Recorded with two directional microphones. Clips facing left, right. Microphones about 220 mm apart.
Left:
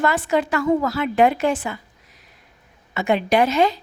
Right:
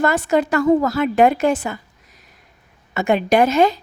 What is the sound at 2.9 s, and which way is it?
Speech, 45° right (ahead or behind).